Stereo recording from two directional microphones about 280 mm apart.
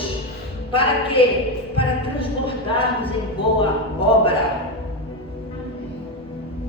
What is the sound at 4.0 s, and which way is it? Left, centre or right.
Music, centre.